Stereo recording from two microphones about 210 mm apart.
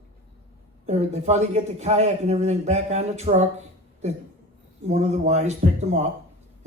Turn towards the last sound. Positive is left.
turn(degrees=-30)  # may be behind; listen again after turning